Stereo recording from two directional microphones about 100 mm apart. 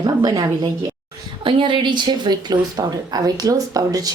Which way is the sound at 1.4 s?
55° right (ahead or behind).